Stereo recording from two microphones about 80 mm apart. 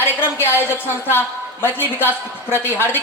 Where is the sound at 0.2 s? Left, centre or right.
Left.